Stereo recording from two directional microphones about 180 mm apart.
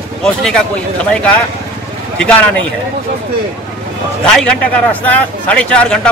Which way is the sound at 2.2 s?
5° left (ahead or behind).